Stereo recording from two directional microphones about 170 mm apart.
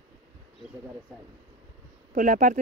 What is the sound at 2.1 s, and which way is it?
Speech, 50° right (ahead or behind).